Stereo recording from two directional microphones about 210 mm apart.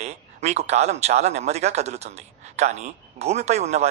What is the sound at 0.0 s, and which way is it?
Speech, 30° right (ahead or behind).